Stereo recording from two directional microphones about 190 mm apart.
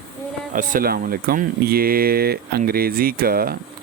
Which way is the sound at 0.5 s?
45° right (ahead or behind).